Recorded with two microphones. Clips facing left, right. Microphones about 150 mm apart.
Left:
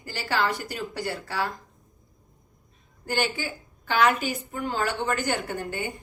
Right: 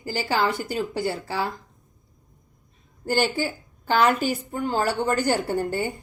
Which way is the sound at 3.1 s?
35° right (ahead or behind).